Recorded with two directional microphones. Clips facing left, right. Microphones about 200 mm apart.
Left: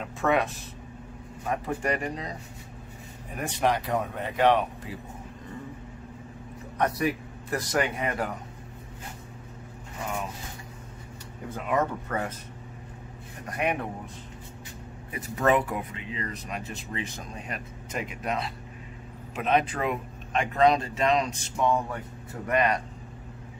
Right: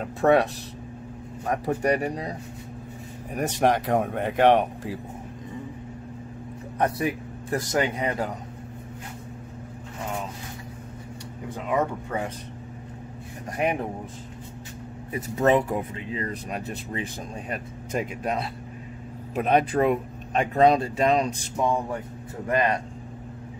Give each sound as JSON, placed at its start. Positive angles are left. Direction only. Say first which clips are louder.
{"t": 0.0, "sound": "speech", "louder": "right 6 dB", "side_deg": -35}
{"t": 1.7, "sound": "speech", "louder": "right 7 dB", "side_deg": -35}
{"t": 3.3, "sound": "speech", "louder": "right 4 dB", "side_deg": -45}
{"t": 6.8, "sound": "speech", "louder": "right 1 dB", "side_deg": -25}
{"t": 11.5, "sound": "speech", "louder": "right 1 dB", "side_deg": -10}
{"t": 13.6, "sound": "speech", "louder": "right 3 dB", "side_deg": -35}
{"t": 15.1, "sound": "speech", "louder": "right 3 dB", "side_deg": -25}
{"t": 22.5, "sound": "speech", "louder": "right 1 dB", "side_deg": -30}